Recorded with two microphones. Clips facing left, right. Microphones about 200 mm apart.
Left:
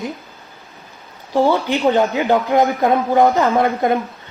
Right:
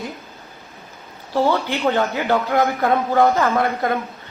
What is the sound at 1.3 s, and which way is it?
A man's voice, 15° left (ahead or behind).